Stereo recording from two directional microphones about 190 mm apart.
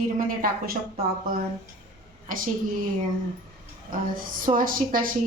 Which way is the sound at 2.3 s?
45° right (ahead or behind).